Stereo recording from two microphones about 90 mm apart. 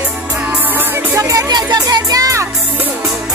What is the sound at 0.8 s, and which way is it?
Music, 30° right (ahead or behind).